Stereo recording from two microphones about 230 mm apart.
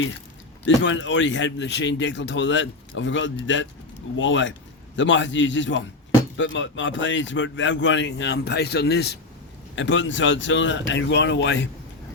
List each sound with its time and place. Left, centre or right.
0.6 s speech: left